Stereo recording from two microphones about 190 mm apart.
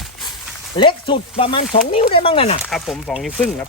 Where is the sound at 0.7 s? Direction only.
25° left (ahead or behind).